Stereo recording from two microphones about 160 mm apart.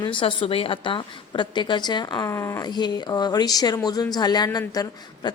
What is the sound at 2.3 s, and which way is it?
Speech, 15° left (ahead or behind).